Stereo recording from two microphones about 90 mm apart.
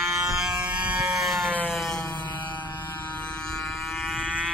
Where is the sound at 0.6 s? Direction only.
15° right (ahead or behind).